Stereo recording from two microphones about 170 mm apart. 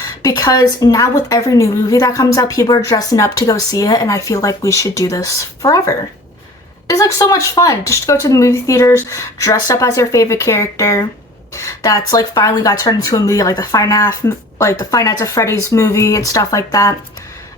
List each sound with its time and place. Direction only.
0.0 s speech: 20° left (ahead or behind)